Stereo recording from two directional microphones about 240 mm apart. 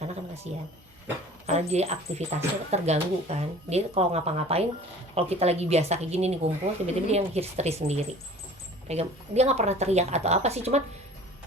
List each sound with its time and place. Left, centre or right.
0.5 s speech: right